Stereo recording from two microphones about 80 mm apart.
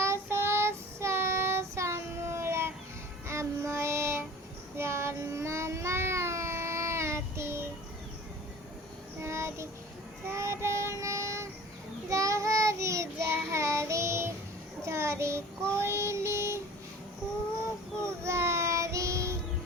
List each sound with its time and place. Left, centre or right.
0.0 s child singing: right
9.2 s child singing: right
18.0 s child singing: right